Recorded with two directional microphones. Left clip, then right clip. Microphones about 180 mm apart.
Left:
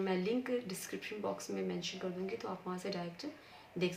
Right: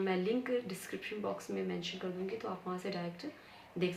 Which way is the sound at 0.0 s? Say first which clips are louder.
Right 2 dB; 20° left (ahead or behind).